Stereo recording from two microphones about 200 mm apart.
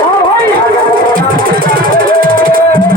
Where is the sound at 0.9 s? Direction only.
45° right (ahead or behind).